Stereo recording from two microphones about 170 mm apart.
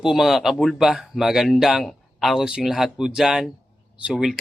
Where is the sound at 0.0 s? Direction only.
Centre (ahead or behind).